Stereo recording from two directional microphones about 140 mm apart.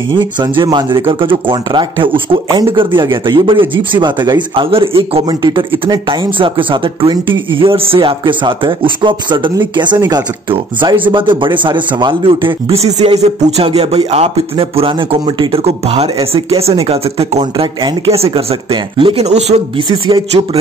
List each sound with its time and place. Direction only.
0.1 s speech: 35° right (ahead or behind)
19.2 s speech: 50° right (ahead or behind)